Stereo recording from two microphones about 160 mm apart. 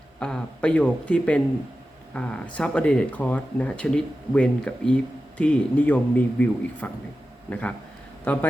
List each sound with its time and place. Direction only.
0.2 s a man's voice: 5° left (ahead or behind)